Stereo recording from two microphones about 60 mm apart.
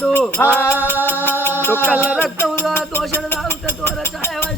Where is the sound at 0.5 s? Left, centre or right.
Left.